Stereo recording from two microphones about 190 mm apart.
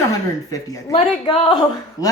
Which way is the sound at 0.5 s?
20° left (ahead or behind).